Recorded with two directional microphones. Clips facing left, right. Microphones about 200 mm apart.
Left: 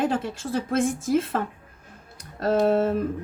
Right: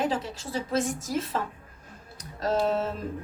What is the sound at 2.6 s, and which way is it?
Speech, 55° left (ahead or behind).